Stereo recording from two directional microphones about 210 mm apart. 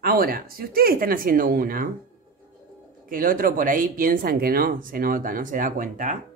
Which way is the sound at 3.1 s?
40° right (ahead or behind).